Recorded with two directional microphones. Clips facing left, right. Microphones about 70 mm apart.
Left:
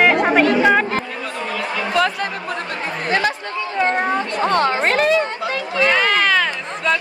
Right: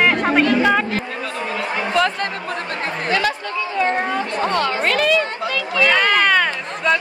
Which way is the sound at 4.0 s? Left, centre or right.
Left.